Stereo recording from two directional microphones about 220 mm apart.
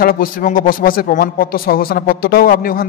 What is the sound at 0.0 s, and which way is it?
A man's voice, 40° left (ahead or behind).